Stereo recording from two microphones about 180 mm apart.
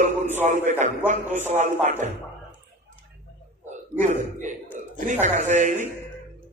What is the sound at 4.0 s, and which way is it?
Speech, 45° right (ahead or behind).